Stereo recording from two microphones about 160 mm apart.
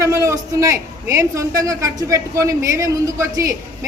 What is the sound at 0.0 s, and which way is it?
A man's voice, 20° right (ahead or behind).